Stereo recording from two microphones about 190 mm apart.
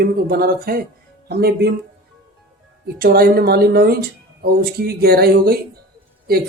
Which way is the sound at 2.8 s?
55° right (ahead or behind).